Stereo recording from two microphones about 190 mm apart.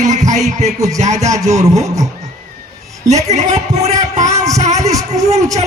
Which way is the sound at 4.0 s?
40° right (ahead or behind).